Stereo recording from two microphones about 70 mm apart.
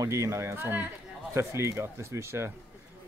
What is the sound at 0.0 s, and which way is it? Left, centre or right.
Speech, right.